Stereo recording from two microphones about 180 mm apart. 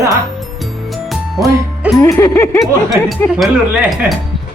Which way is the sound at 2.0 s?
15° left (ahead or behind).